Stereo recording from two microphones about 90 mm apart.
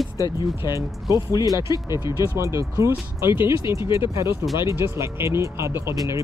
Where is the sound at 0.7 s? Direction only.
35° right (ahead or behind).